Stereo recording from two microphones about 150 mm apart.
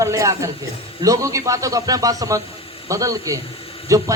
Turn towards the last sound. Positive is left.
turn(degrees=-20)  # may be behind; listen again after turning